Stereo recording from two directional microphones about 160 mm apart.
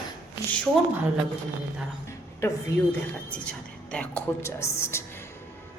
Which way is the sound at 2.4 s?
15° left (ahead or behind).